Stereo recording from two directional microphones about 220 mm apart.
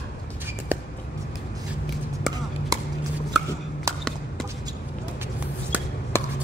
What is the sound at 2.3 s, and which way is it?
Chop, centre (ahead or behind).